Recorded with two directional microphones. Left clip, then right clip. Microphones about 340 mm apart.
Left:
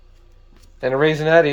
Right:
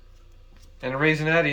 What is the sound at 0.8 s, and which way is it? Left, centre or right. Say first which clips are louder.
Speech: left 6 dB; centre.